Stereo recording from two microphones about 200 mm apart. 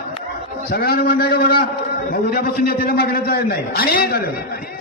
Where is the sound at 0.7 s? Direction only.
50° left (ahead or behind).